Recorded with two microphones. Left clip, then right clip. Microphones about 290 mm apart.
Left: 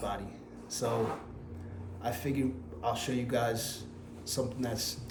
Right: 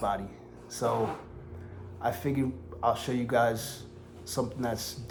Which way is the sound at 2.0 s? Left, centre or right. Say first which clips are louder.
Right 4 dB; right.